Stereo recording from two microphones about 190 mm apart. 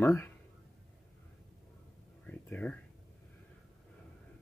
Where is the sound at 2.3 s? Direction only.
10° left (ahead or behind).